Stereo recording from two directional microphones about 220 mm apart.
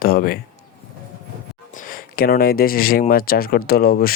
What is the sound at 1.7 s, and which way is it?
Speech, 40° left (ahead or behind).